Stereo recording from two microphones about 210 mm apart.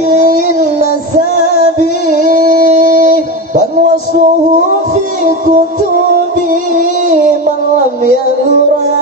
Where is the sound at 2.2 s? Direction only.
40° right (ahead or behind).